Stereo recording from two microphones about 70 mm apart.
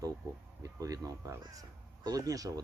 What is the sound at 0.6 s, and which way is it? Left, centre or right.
Speech, right.